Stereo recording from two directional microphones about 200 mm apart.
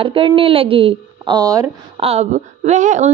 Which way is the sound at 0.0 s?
25° right (ahead or behind).